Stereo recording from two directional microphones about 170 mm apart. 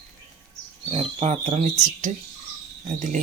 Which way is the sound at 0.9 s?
40° right (ahead or behind).